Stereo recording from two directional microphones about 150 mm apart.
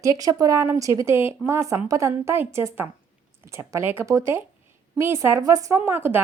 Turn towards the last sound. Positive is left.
turn(degrees=-15)  # may be behind; listen again after turning